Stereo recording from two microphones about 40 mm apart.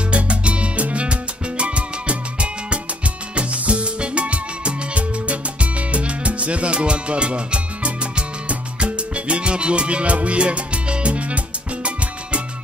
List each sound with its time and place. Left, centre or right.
0.1 s music: right